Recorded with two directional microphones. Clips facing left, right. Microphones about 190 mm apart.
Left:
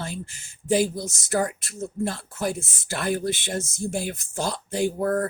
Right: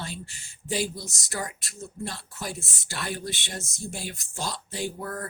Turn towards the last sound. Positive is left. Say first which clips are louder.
# left 10 dB
turn(degrees=50)  # may be behind; listen again after turning